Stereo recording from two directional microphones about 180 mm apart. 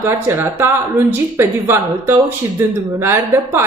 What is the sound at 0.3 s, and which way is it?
A woman's voice, 15° right (ahead or behind).